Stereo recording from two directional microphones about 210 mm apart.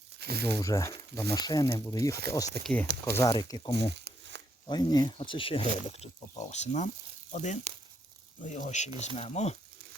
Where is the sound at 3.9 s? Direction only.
55° right (ahead or behind).